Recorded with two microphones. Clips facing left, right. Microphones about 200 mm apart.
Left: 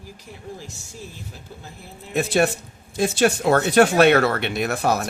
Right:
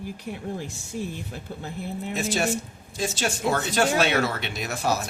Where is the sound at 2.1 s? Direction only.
60° left (ahead or behind).